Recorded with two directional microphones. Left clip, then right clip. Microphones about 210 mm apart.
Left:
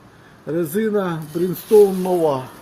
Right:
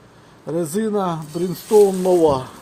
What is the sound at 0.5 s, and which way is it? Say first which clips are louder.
A man's voice: left 1 dB; 25° right (ahead or behind).